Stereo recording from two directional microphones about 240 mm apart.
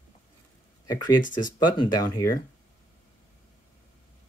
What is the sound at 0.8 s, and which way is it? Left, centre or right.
Speech, centre.